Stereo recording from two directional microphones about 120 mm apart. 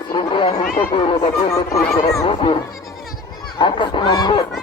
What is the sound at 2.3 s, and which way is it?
Speech, 50° left (ahead or behind).